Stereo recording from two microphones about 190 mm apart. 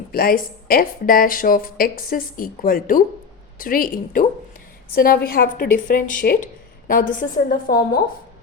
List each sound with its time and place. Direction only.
0.1 s a woman's voice: 50° left (ahead or behind)